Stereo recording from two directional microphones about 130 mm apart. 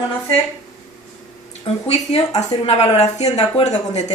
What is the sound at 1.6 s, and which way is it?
Speech, 50° left (ahead or behind).